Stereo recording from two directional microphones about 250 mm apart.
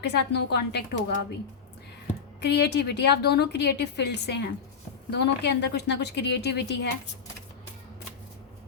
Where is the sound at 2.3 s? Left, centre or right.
Left.